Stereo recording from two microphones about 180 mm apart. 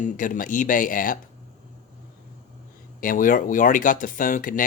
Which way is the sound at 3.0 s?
50° left (ahead or behind).